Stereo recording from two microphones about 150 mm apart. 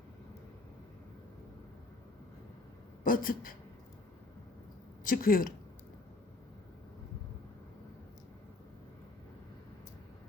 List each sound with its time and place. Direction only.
3.0 s speech: 70° left (ahead or behind)
5.0 s a woman's voice: 70° left (ahead or behind)